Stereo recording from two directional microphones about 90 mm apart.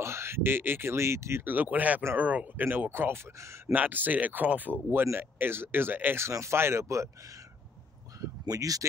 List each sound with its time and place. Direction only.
0.0 s speech: 30° right (ahead or behind)
3.7 s speech: 20° right (ahead or behind)
8.2 s speech: 40° right (ahead or behind)